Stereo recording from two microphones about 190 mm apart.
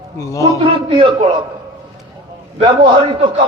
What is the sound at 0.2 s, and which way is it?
Speech, 15° left (ahead or behind).